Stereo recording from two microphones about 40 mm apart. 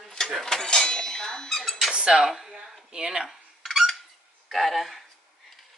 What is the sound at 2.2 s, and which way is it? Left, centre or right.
Speech, centre.